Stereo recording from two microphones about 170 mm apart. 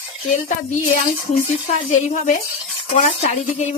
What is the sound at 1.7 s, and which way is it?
Speech, 40° left (ahead or behind).